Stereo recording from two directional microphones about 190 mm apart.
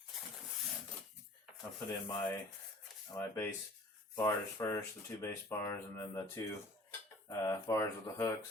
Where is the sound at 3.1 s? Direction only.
15° left (ahead or behind).